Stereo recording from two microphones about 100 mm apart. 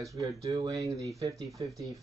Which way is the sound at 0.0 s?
35° right (ahead or behind).